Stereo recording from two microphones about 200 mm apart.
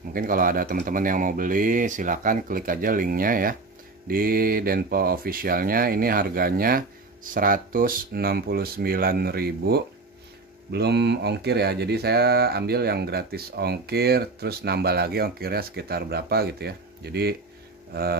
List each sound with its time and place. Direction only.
0.1 s speech: 45° right (ahead or behind)